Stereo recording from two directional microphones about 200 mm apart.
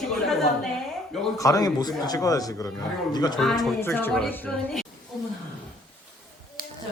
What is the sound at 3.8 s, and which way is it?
A woman's voice, 10° left (ahead or behind).